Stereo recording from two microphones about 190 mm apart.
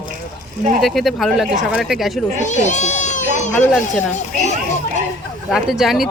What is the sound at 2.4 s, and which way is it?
Speech, 40° left (ahead or behind).